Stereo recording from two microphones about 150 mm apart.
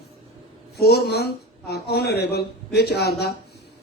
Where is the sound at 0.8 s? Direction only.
90° left.